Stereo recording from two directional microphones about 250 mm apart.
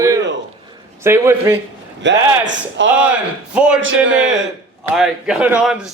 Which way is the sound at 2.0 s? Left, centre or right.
Right.